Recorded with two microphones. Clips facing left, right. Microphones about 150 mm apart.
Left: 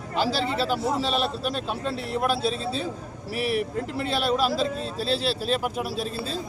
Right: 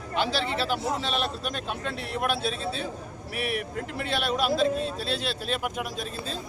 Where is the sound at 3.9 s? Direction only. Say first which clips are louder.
Left 3 dB; 30° left (ahead or behind).